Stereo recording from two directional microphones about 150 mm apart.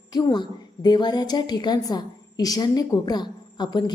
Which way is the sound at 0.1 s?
25° left (ahead or behind).